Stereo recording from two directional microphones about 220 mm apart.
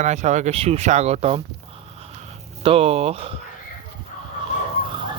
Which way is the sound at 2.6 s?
25° right (ahead or behind).